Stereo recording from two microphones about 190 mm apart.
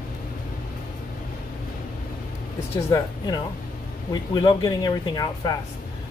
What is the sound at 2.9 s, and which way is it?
A man's voice, 20° left (ahead or behind).